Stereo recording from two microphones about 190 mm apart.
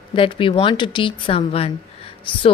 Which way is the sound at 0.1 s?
25° left (ahead or behind).